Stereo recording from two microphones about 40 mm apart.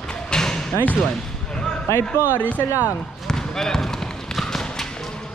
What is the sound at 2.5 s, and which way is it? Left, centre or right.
Speech, right.